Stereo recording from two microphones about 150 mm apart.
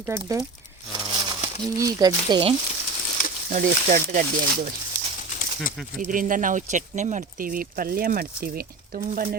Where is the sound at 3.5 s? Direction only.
60° right (ahead or behind).